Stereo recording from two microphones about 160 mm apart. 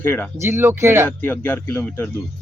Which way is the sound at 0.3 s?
15° right (ahead or behind).